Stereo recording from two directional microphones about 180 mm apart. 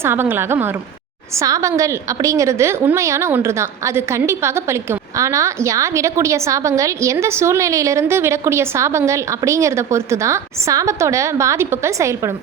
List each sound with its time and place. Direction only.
0.0 s a woman's voice: 10° right (ahead or behind)